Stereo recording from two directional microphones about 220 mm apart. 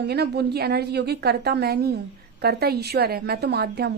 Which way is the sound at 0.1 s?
45° right (ahead or behind).